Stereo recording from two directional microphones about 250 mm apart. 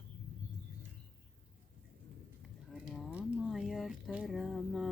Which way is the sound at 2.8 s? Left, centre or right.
Centre.